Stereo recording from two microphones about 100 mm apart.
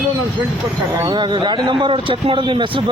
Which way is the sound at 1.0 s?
45° right (ahead or behind).